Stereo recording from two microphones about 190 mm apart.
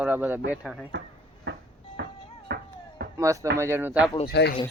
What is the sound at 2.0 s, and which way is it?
Music, 65° right (ahead or behind).